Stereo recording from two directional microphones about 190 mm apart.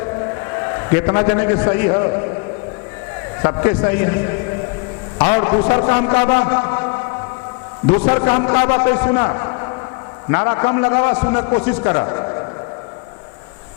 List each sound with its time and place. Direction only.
0.3 s a sound: 20° left (ahead or behind)
1.3 s a man's voice: 20° left (ahead or behind)
3.4 s a man's voice: 25° left (ahead or behind)
8.0 s a man's voice: 25° left (ahead or behind)